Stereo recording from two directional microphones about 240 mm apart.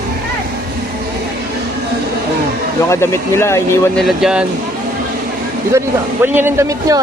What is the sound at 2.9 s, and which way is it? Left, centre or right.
Speech, centre.